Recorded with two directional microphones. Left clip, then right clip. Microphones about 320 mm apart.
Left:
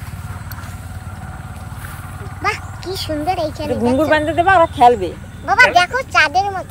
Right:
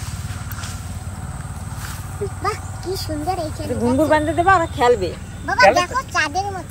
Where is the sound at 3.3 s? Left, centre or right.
Centre.